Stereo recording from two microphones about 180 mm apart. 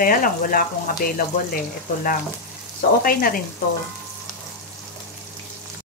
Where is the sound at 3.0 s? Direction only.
55° left (ahead or behind).